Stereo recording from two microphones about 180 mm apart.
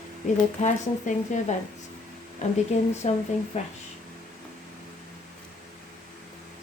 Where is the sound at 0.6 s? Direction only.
40° left (ahead or behind).